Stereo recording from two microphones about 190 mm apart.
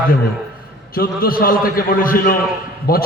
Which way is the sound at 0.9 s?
50° left (ahead or behind).